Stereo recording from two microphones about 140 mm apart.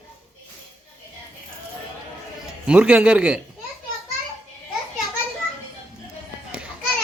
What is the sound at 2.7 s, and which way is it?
Speech, 10° right (ahead or behind).